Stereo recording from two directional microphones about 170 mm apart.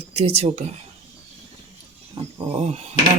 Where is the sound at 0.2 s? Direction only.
40° right (ahead or behind).